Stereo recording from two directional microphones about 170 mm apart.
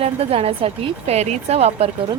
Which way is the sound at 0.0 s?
35° right (ahead or behind).